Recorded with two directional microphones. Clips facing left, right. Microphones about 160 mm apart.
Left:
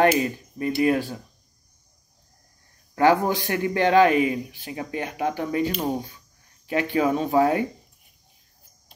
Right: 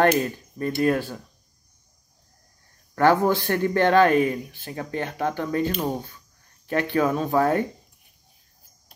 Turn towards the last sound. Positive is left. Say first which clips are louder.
# left 1 dB
turn(degrees=15)  # may be behind; listen again after turning